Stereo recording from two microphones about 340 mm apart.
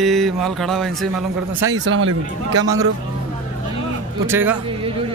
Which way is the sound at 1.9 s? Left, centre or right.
Right.